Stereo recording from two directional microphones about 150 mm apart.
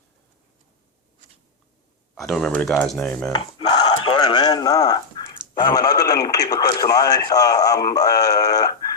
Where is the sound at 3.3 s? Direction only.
30° left (ahead or behind).